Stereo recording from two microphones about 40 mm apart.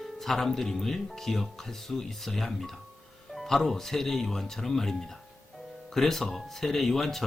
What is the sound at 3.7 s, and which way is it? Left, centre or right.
Speech, centre.